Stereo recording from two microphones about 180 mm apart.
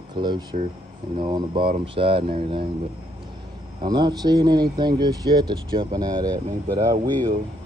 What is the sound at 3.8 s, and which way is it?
Speech, 25° right (ahead or behind).